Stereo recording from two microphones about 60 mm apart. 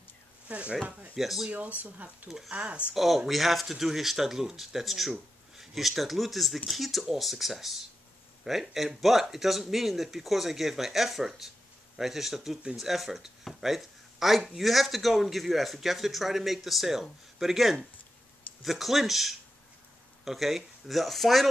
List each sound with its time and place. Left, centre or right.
0.5 s speech: right
1.1 s speech: centre
1.5 s speech: right
2.2 s speech: centre
2.5 s speech: right
2.9 s speech: centre